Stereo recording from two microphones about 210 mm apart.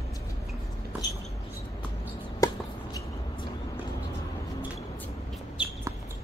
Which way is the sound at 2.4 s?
15° left (ahead or behind).